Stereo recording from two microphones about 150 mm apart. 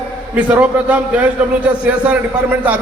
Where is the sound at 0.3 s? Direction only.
10° right (ahead or behind).